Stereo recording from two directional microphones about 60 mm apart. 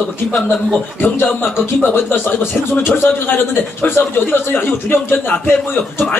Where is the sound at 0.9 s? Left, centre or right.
Left.